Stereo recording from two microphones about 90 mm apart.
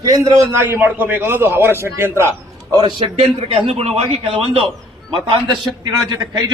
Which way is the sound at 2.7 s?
50° right (ahead or behind).